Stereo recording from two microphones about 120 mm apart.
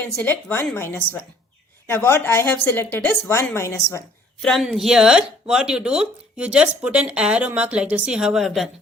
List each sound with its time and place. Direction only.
0.0 s a woman's voice: 15° left (ahead or behind)
4.4 s speech: centre (ahead or behind)